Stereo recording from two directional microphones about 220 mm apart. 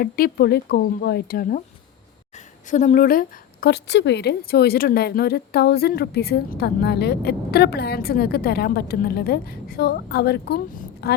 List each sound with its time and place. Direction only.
0.0 s a woman's voice: 45° left (ahead or behind)
2.6 s a woman's voice: 35° left (ahead or behind)